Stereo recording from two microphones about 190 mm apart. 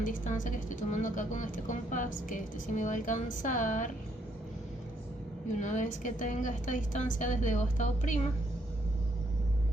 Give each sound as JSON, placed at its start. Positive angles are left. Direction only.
{"t": 0.0, "sound": "speech", "side_deg": 45}
{"t": 5.5, "sound": "speech", "side_deg": 40}